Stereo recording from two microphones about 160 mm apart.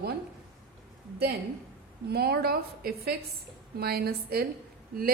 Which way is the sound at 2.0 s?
80° right.